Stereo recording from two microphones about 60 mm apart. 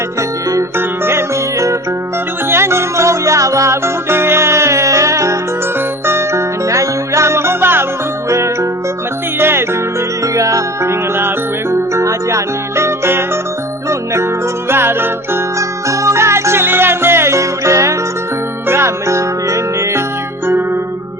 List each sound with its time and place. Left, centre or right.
0.8 s music: right
2.5 s music: right
9.4 s music: right
10.3 s music: right
11.7 s music: right
14.7 s music: right
15.5 s music: right